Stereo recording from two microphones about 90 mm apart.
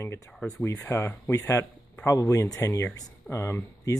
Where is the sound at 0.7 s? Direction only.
30° left (ahead or behind).